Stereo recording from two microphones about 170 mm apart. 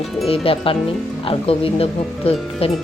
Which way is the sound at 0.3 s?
30° left (ahead or behind).